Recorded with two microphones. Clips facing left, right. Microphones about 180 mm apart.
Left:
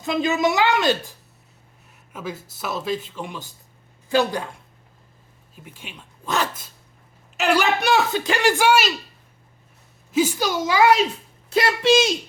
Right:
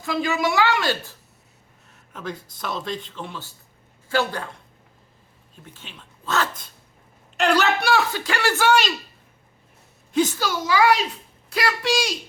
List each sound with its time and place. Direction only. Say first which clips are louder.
0.0 s a woman's voice: left 3 dB; 20° left (ahead or behind)
2.1 s speech: left 1 dB; 5° left (ahead or behind)
10.1 s a woman's voice: left 1 dB; 10° left (ahead or behind)